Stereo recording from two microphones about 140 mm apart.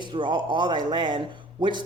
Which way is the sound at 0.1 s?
35° right (ahead or behind).